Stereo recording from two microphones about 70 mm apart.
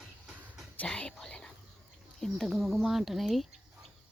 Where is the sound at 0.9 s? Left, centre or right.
Centre.